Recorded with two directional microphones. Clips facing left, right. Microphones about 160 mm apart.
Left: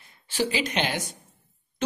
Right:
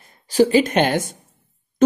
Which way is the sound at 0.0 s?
45° right (ahead or behind).